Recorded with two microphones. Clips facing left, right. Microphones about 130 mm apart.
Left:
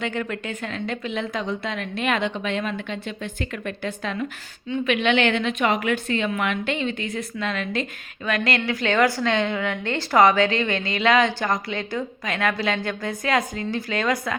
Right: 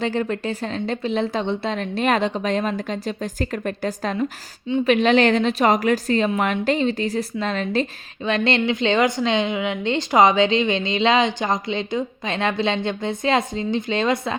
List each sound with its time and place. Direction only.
0.0 s a woman's voice: 30° right (ahead or behind)